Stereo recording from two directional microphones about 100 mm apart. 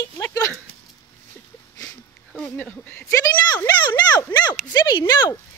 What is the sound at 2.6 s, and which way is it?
Speech, 20° left (ahead or behind).